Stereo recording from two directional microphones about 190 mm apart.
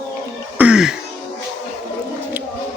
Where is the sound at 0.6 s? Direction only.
5° right (ahead or behind).